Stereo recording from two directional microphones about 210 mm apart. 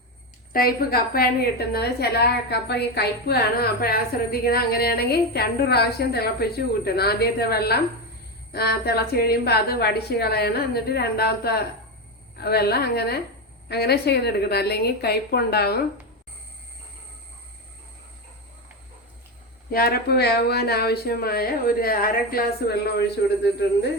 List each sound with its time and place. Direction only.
0.5 s a woman's voice: 45° left (ahead or behind)
19.7 s a woman's voice: 45° left (ahead or behind)